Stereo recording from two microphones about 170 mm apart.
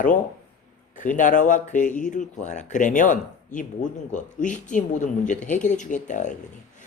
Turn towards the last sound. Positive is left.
turn(degrees=45)  # may be behind; listen again after turning